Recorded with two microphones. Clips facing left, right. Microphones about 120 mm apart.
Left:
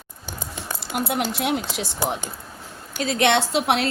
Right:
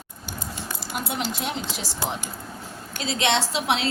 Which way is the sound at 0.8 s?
65° left (ahead or behind).